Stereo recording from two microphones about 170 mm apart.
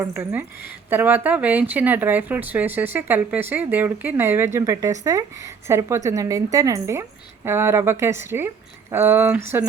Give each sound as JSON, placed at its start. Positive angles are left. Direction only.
{"t": 0.0, "sound": "speech", "side_deg": -15}